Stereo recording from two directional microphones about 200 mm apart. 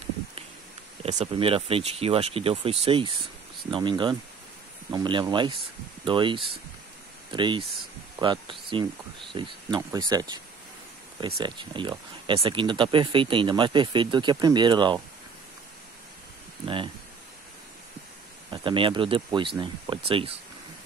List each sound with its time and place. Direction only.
1.0 s speech: 30° right (ahead or behind)
16.6 s speech: 25° right (ahead or behind)
18.5 s speech: 25° right (ahead or behind)